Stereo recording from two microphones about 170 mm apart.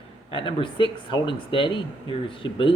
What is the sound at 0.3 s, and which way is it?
Speech, 30° left (ahead or behind).